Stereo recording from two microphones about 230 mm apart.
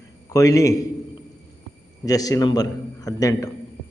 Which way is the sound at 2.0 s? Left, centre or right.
Centre.